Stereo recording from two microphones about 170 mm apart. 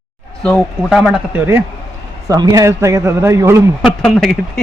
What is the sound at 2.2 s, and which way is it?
A man's voice, 20° right (ahead or behind).